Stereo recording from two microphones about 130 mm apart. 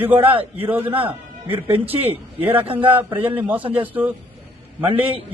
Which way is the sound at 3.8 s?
15° right (ahead or behind).